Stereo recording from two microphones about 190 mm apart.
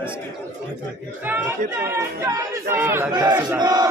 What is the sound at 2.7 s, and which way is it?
Speech, 10° right (ahead or behind).